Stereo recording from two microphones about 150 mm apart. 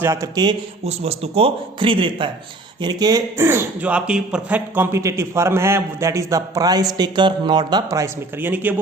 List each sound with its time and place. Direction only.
0.0 s speech: 20° right (ahead or behind)
0.9 s a man's voice: 40° right (ahead or behind); by 8.7 s 10° right (ahead or behind)